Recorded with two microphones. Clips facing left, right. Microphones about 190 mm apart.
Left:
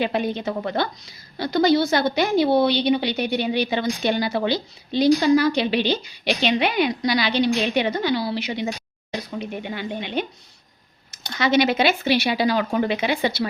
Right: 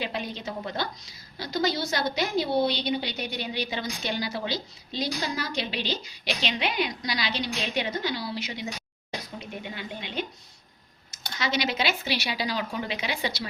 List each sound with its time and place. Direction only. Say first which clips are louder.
0.0 s a woman's voice: left 9 dB; 55° left (ahead or behind)